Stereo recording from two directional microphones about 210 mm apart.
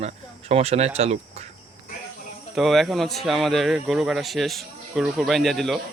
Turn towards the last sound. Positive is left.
turn(degrees=0)  # may be behind; listen again after turning